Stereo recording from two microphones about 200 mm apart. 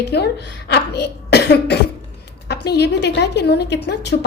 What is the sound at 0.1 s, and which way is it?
A woman's voice, 55° left (ahead or behind).